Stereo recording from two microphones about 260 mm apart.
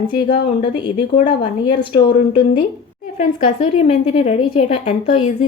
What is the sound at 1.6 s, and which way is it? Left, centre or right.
A woman's voice, centre.